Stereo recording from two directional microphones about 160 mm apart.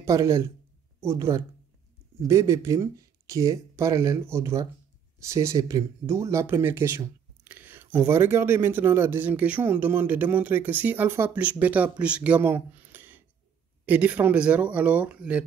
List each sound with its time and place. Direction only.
0.0 s speech: 20° right (ahead or behind)